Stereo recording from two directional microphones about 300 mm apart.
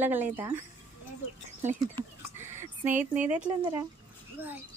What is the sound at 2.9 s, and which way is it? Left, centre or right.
Speech, right.